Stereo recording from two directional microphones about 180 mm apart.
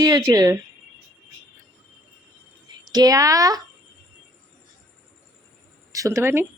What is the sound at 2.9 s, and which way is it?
Speech, 20° right (ahead or behind).